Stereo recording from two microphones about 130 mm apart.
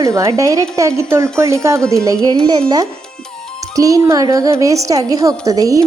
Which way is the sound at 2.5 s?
30° right (ahead or behind).